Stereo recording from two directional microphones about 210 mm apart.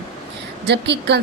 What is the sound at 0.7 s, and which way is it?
Speech, 55° right (ahead or behind).